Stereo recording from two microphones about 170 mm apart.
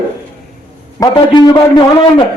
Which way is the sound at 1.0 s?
25° left (ahead or behind).